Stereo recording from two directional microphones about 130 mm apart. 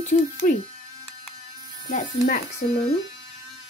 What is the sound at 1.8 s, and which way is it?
Speech, 90° left.